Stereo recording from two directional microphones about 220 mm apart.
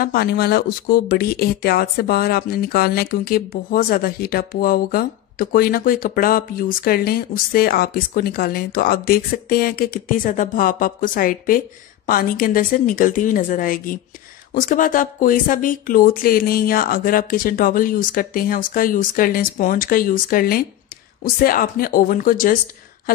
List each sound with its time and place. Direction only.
0.0 s speech: 45° left (ahead or behind)